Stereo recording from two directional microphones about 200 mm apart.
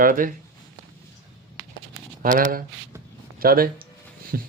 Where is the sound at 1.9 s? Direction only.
45° right (ahead or behind).